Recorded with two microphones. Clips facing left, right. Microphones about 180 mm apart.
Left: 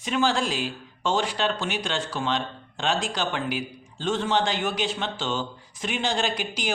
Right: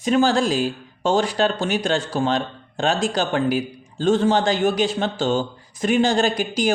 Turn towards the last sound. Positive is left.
turn(degrees=-40)  # may be behind; listen again after turning